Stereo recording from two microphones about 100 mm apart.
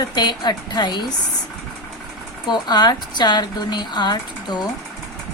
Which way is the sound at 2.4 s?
45° left (ahead or behind).